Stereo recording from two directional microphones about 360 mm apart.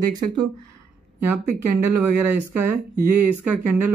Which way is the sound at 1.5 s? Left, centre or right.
Right.